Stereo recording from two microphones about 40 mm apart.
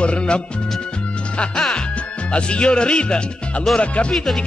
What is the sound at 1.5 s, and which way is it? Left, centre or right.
Music, centre.